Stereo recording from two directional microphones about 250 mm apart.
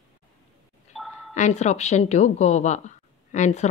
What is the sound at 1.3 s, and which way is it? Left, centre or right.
A woman's voice, left.